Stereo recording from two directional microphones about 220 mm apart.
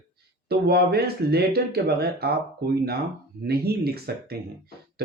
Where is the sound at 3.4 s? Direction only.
45° right (ahead or behind).